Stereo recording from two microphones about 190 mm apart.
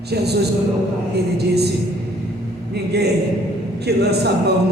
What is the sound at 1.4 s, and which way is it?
Speech, 60° right (ahead or behind).